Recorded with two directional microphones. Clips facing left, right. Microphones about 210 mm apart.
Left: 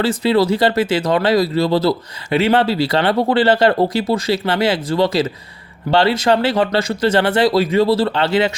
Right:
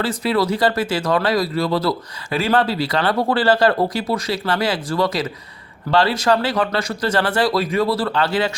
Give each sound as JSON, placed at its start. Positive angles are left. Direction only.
{"t": 0.0, "sound": "speech", "side_deg": 25}